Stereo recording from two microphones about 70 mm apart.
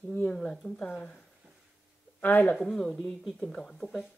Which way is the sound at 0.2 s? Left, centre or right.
Centre.